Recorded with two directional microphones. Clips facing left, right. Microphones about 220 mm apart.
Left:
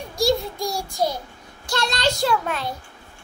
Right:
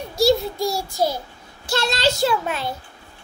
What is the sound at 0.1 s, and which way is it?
Child singing, 5° right (ahead or behind).